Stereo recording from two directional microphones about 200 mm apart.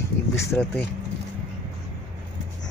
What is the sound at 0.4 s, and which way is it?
Speech, 15° left (ahead or behind).